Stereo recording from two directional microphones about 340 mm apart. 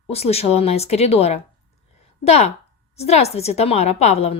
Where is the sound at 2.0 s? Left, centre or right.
Centre.